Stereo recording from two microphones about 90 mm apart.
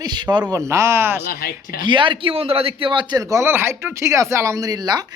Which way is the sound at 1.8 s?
60° right (ahead or behind).